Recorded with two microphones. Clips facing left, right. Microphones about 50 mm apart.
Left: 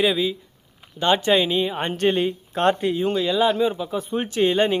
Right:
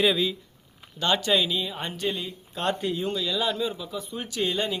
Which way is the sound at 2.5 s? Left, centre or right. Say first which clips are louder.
Left 7 dB; left.